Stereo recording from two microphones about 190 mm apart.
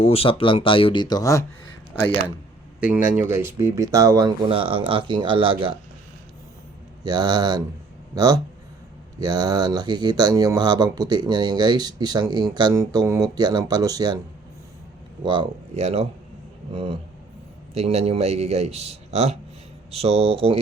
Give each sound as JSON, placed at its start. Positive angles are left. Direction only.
{"t": 0.0, "sound": "speech", "side_deg": 30}
{"t": 3.2, "sound": "speech", "side_deg": -10}
{"t": 4.4, "sound": "speech", "side_deg": -30}
{"t": 7.0, "sound": "speech", "side_deg": -20}
{"t": 15.2, "sound": "speech", "side_deg": -25}